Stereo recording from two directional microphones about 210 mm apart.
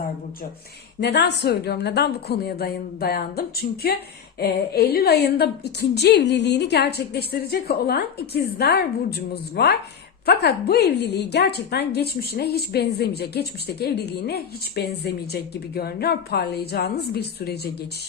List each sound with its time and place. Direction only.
1.0 s a woman's voice: 55° left (ahead or behind)